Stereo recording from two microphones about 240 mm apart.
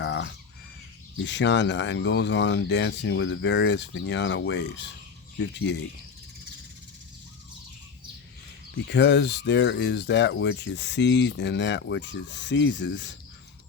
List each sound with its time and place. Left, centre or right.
0.0 s squawk: left
1.2 s speech: left
8.9 s speech: left